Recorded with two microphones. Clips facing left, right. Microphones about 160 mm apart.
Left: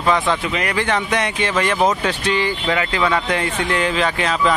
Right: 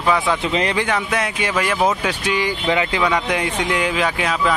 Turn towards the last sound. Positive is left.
turn(degrees=-10)  # may be behind; listen again after turning